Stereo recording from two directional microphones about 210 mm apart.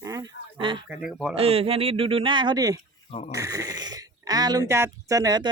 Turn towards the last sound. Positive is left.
turn(degrees=-20)  # may be behind; listen again after turning